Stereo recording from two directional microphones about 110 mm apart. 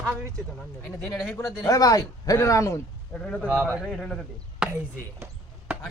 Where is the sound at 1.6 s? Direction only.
30° left (ahead or behind).